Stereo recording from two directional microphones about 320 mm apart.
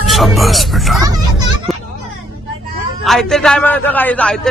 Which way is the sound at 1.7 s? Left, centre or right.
Centre.